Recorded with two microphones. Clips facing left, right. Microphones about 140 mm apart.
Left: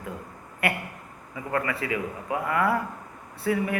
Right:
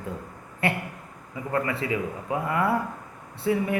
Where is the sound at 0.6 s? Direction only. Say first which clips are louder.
Right 1 dB; 25° right (ahead or behind).